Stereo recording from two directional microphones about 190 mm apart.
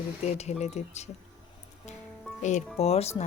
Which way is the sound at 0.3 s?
35° left (ahead or behind).